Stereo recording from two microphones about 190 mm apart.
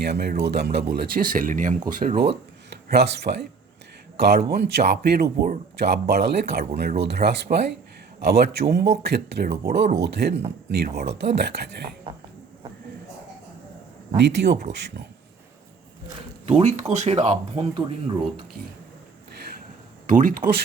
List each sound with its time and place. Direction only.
0.0 s speech: 60° right (ahead or behind)
2.6 s speech: 60° right (ahead or behind)
12.1 s speech: 30° right (ahead or behind)
14.2 s speech: 60° right (ahead or behind)
16.5 s speech: 35° right (ahead or behind)
20.1 s speech: 45° right (ahead or behind)